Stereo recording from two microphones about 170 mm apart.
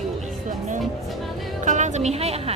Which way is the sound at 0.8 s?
Centre (ahead or behind).